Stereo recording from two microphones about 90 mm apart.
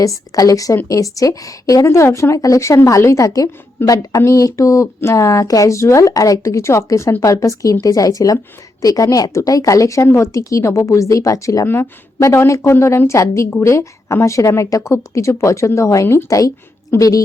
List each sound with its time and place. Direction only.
0.0 s a woman's voice: 40° left (ahead or behind)